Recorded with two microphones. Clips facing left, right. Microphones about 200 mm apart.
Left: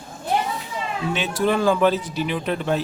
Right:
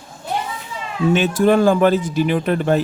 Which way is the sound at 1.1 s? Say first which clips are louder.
Right 7 dB; 50° right (ahead or behind).